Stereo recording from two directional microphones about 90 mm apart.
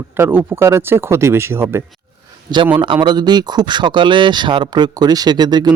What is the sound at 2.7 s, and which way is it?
Speech, 70° right (ahead or behind).